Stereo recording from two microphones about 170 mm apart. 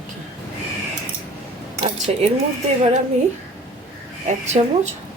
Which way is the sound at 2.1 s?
40° right (ahead or behind).